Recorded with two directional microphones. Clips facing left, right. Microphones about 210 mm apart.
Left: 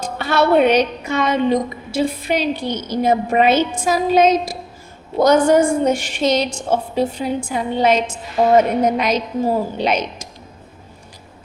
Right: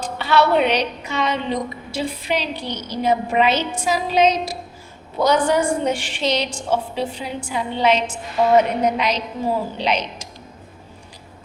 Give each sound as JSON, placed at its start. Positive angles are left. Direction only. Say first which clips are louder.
{"t": 0.0, "sound": "a woman's voice", "louder": "left 1 dB", "side_deg": 45}